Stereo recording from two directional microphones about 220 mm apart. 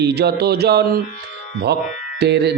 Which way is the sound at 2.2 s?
50° right (ahead or behind).